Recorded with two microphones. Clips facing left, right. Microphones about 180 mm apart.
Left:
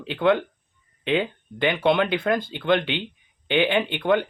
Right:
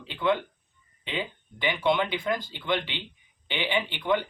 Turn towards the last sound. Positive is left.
turn(degrees=60)  # may be behind; listen again after turning